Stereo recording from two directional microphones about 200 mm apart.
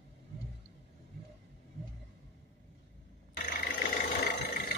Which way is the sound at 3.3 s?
45° left (ahead or behind).